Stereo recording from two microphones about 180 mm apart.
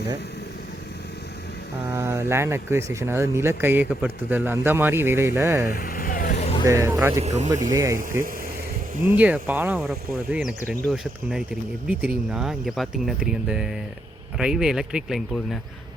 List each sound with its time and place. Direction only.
1.9 s speech: 15° right (ahead or behind)
5.7 s vehicle: 55° left (ahead or behind)
6.4 s vehicle: 35° left (ahead or behind)
6.7 s speech: 15° right (ahead or behind)
7.3 s speech: 40° right (ahead or behind)
7.7 s speech: 15° right (ahead or behind); by 15.5 s centre (ahead or behind)